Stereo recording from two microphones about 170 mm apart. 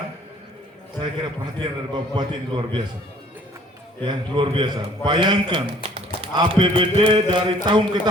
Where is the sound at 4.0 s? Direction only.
30° right (ahead or behind).